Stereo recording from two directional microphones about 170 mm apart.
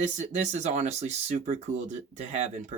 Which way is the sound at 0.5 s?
45° right (ahead or behind).